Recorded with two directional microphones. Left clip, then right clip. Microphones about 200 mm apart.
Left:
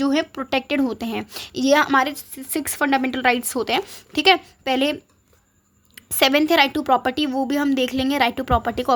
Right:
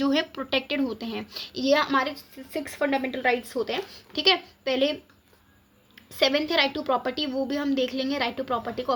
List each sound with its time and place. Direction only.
0.0 s a woman's voice: 30° left (ahead or behind); by 8.9 s 50° left (ahead or behind)